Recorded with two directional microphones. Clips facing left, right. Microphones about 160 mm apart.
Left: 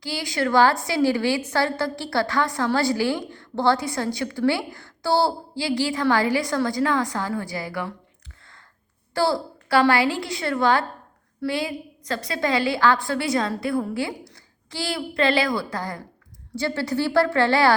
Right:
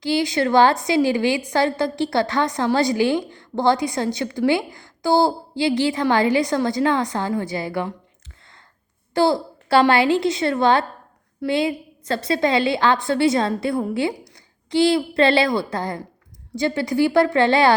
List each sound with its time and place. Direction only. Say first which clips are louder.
0.0 s a woman's voice: right 6 dB; 20° right (ahead or behind)
9.1 s a woman's voice: right 4 dB; 20° right (ahead or behind)